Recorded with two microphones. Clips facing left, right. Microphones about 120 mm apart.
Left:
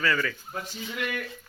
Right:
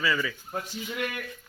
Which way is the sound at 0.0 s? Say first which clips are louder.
Left 1 dB; 5° right (ahead or behind).